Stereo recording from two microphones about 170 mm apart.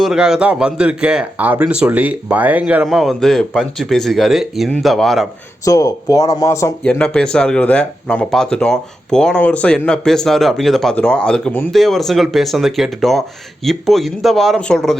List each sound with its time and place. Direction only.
0.0 s speech: 5° right (ahead or behind)
5.6 s speech: 20° left (ahead or behind)
7.0 s speech: 5° left (ahead or behind)